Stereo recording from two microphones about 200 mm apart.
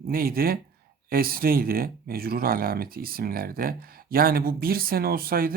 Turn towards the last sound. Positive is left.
turn(degrees=-45)  # may be behind; listen again after turning